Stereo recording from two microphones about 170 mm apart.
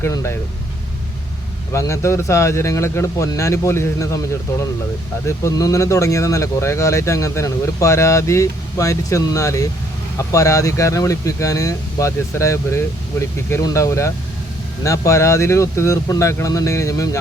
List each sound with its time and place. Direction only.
0.0 s speech: 15° left (ahead or behind)
1.7 s speech: 15° left (ahead or behind)
5.2 s speech: 15° left (ahead or behind)